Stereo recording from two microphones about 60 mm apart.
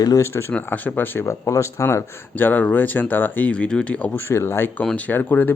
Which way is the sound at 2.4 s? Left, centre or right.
Left.